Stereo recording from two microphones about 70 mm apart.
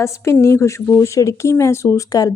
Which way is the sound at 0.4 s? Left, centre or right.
Left.